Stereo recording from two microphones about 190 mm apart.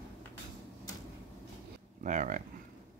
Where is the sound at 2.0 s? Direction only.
40° right (ahead or behind).